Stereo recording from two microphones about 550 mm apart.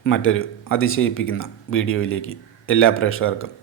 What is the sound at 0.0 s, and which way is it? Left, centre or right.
A man's voice, left.